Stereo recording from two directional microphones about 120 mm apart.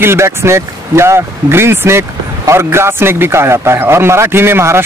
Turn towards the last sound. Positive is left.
turn(degrees=-20)  # may be behind; listen again after turning